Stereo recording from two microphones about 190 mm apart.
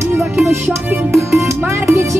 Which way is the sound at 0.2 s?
15° right (ahead or behind).